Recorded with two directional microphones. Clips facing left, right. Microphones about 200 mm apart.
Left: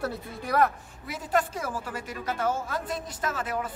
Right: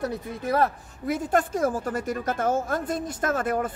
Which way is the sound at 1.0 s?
50° right (ahead or behind).